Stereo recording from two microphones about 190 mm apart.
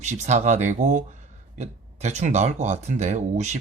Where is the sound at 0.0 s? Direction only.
35° right (ahead or behind).